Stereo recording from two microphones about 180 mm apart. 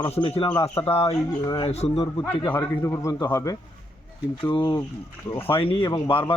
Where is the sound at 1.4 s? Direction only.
25° left (ahead or behind).